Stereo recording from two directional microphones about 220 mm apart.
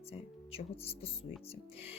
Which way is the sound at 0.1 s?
25° left (ahead or behind).